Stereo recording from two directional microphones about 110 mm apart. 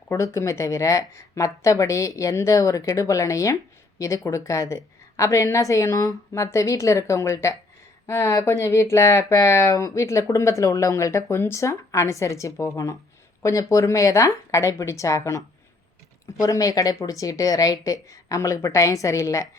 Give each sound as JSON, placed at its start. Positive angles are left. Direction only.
{"t": 0.1, "sound": "a woman's voice", "side_deg": 30}